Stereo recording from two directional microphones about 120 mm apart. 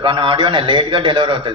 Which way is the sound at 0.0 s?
45° right (ahead or behind).